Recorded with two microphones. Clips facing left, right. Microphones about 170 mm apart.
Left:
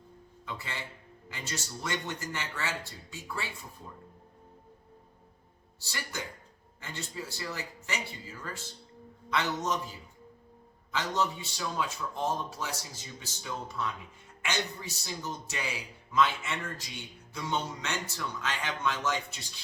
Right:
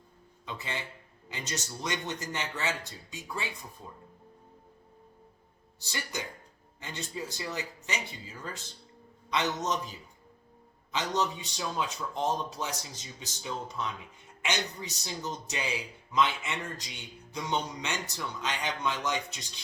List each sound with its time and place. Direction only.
0.4 s speech: 20° right (ahead or behind)
5.8 s speech: 20° right (ahead or behind)
10.9 s speech: 20° right (ahead or behind)